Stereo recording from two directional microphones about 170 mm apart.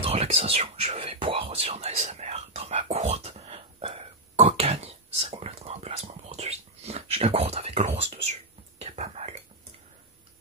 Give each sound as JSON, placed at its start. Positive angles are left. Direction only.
{"t": 0.0, "sound": "whispering", "side_deg": -35}